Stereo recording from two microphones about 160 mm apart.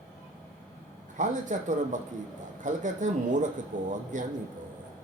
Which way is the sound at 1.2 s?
50° right (ahead or behind).